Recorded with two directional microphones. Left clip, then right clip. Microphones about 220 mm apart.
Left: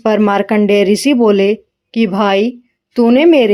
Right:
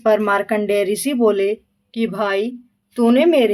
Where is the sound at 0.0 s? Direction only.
30° left (ahead or behind).